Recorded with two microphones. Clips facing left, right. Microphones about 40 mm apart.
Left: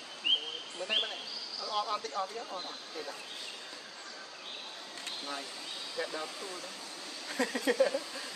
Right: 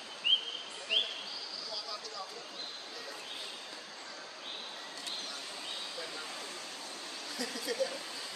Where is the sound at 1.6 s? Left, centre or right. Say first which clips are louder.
Left 13 dB; left.